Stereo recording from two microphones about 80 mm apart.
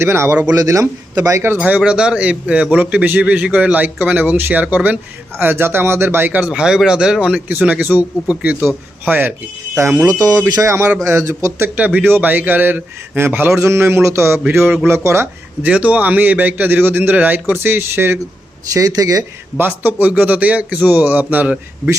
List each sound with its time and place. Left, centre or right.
0.0 s a man's voice: right
0.5 s speech: right
1.5 s a man's voice: centre
6.5 s speech: centre; by 9.3 s right
10.1 s speech: right
10.5 s a man's voice: right
11.8 s a man's voice: centre; by 15.3 s right
15.6 s a man's voice: centre
18.7 s speech: right
19.5 s a man's voice: right